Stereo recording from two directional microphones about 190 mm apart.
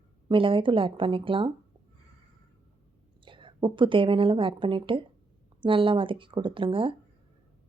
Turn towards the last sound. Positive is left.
turn(degrees=-25)  # may be behind; listen again after turning